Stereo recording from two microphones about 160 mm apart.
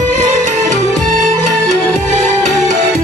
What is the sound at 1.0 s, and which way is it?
Music, 55° right (ahead or behind).